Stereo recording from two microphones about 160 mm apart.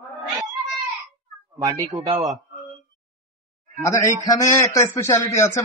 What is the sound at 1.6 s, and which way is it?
Speech, 20° right (ahead or behind).